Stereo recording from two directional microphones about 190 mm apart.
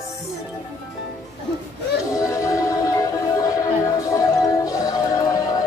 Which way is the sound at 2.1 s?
15° left (ahead or behind).